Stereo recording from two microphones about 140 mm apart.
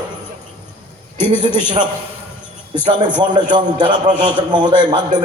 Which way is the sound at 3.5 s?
35° right (ahead or behind).